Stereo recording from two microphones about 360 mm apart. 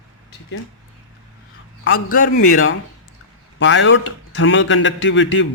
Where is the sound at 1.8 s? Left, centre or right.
Left.